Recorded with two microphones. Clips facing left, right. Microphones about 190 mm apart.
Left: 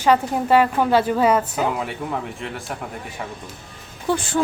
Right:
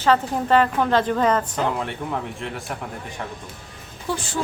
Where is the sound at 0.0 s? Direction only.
10° left (ahead or behind).